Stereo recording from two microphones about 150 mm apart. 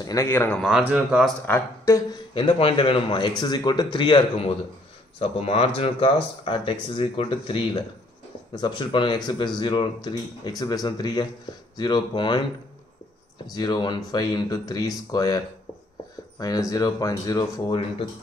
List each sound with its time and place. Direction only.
0.0 s speech: 20° left (ahead or behind)
0.6 s speech: 5° right (ahead or behind)
1.5 s speech: 20° left (ahead or behind)
2.3 s speech: 35° left (ahead or behind)
13.5 s speech: 25° left (ahead or behind)